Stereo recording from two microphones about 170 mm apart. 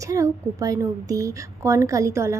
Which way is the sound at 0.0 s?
20° right (ahead or behind).